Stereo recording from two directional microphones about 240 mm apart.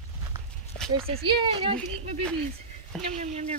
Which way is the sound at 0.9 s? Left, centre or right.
Right.